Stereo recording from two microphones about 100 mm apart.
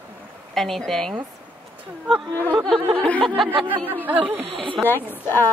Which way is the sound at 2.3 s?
35° right (ahead or behind).